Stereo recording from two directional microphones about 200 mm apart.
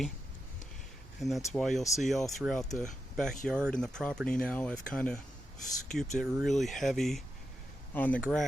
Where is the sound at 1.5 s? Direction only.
Centre (ahead or behind).